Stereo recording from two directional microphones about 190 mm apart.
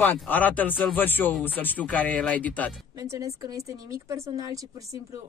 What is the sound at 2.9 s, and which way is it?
Speech, 20° right (ahead or behind).